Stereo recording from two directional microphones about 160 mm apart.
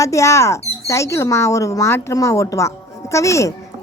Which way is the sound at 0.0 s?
20° left (ahead or behind).